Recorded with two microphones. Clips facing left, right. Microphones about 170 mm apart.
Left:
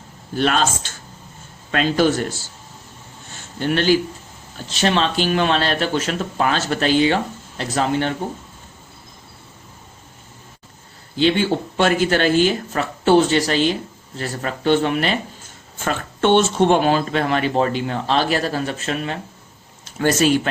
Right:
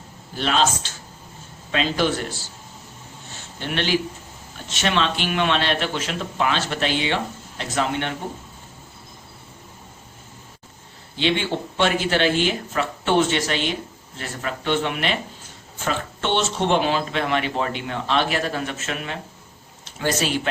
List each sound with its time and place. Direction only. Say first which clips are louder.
0.3 s speech: left 2 dB; 50° left (ahead or behind)
3.6 s speech: left 6 dB; 40° left (ahead or behind)
11.2 s speech: left 5 dB; 40° left (ahead or behind)
15.8 s speech: left 5 dB; 50° left (ahead or behind)
19.8 s speech: left 7 dB; 50° left (ahead or behind)